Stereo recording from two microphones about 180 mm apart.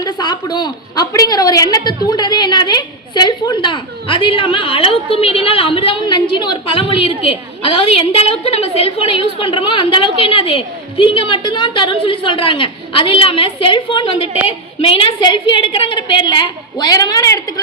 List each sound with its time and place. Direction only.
0.0 s a woman's voice: 25° left (ahead or behind)